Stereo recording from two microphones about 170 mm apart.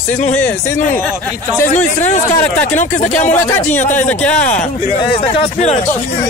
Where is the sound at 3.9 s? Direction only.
10° left (ahead or behind).